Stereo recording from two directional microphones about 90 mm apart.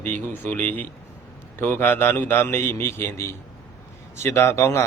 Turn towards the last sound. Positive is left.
turn(degrees=35)  # may be behind; listen again after turning